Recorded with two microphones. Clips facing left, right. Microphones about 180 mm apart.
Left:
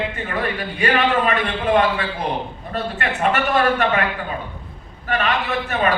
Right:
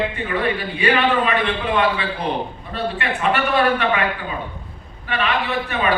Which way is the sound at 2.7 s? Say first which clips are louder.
Even; 45° left (ahead or behind).